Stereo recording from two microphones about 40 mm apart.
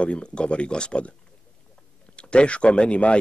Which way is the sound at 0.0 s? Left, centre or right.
Left.